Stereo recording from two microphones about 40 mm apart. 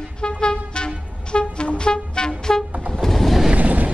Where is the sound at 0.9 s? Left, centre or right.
Right.